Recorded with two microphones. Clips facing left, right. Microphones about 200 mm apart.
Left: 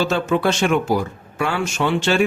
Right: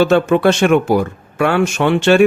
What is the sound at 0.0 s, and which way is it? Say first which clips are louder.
Speech: right 7 dB; 60° right (ahead or behind).